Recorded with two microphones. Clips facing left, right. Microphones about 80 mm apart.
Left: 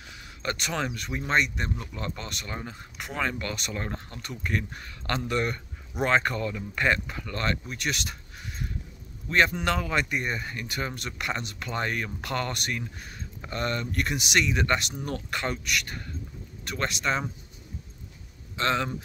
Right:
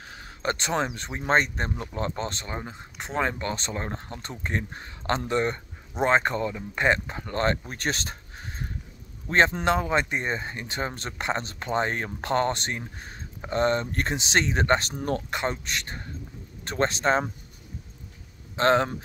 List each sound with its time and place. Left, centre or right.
0.0 s speech: right
15.3 s speech: right
18.6 s speech: right